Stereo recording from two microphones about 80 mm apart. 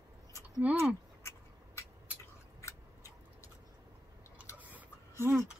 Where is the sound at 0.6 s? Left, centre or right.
Centre.